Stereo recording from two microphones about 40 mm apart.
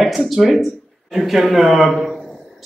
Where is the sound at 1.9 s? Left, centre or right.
Centre.